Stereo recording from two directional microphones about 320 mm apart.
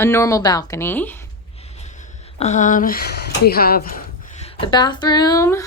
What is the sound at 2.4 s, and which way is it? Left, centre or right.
Speech, left.